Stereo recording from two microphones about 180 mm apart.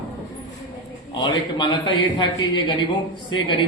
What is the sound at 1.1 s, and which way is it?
A man's voice, 25° left (ahead or behind).